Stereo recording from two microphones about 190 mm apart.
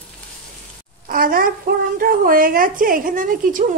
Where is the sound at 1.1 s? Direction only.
50° right (ahead or behind).